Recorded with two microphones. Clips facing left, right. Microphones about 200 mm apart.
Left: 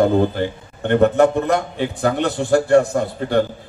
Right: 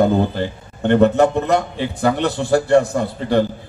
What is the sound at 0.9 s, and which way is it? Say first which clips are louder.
A man's voice: right 1 dB; 55° left (ahead or behind).